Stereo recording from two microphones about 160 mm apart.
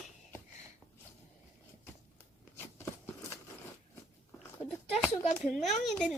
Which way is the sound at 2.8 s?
15° left (ahead or behind).